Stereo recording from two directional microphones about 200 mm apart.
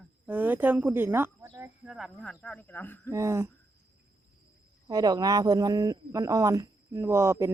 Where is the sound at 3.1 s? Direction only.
15° right (ahead or behind).